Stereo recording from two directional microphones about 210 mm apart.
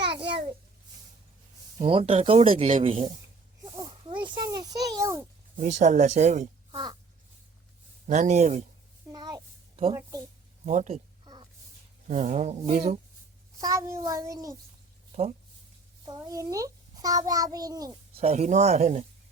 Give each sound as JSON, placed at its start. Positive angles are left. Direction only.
{"t": 1.8, "sound": "speech", "side_deg": -25}
{"t": 3.8, "sound": "a sound", "side_deg": -25}
{"t": 5.5, "sound": "speech", "side_deg": -35}
{"t": 8.0, "sound": "speech", "side_deg": -35}
{"t": 9.1, "sound": "a sound", "side_deg": -20}
{"t": 10.7, "sound": "speech", "side_deg": -35}
{"t": 12.0, "sound": "speech", "side_deg": -35}
{"t": 13.6, "sound": "a child's voice", "side_deg": -15}
{"t": 15.1, "sound": "speech", "side_deg": -30}
{"t": 16.0, "sound": "a child's voice", "side_deg": -15}
{"t": 18.2, "sound": "speech", "side_deg": -30}